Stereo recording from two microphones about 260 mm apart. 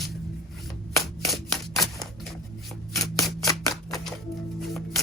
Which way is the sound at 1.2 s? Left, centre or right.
Centre.